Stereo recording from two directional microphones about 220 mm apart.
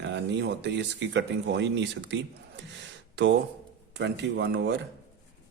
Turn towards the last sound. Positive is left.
turn(degrees=-50)  # may be behind; listen again after turning